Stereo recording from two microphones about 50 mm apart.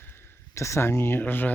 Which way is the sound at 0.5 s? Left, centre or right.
Left.